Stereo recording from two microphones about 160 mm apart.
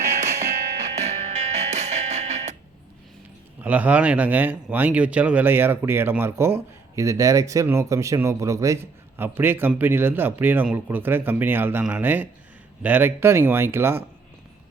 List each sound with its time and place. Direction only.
0.9 s music: 45° right (ahead or behind)
3.6 s speech: 10° right (ahead or behind)